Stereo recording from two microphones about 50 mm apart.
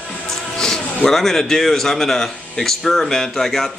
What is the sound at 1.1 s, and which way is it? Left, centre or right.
Speech, centre.